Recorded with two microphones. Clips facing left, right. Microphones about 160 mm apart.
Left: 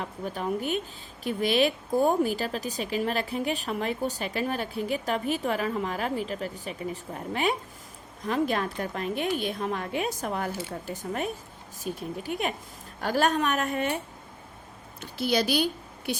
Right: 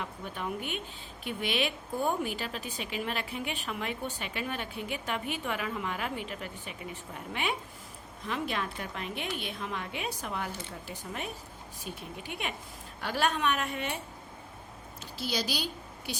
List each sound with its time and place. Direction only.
0.0 s a woman's voice: 40° left (ahead or behind)
15.0 s a woman's voice: 60° left (ahead or behind)